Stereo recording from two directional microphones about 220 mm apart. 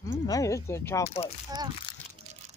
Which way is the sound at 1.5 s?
20° right (ahead or behind).